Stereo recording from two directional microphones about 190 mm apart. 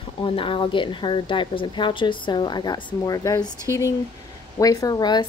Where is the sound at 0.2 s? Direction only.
25° left (ahead or behind).